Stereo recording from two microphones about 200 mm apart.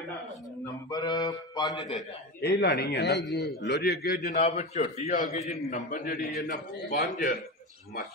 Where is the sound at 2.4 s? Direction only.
55° left (ahead or behind).